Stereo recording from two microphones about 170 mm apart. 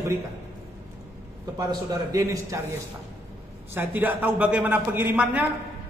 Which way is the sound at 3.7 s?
10° right (ahead or behind).